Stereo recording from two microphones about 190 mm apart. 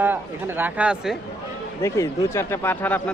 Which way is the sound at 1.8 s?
15° left (ahead or behind).